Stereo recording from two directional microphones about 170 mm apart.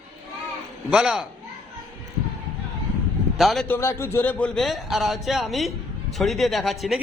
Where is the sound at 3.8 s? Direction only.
15° left (ahead or behind).